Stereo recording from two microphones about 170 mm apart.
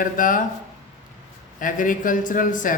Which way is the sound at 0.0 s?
50° left (ahead or behind).